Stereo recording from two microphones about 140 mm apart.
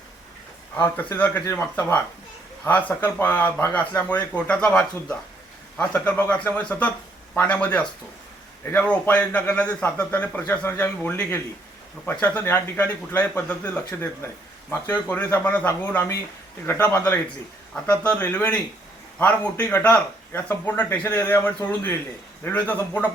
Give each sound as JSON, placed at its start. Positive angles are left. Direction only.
{"t": 0.8, "sound": "speech", "side_deg": 15}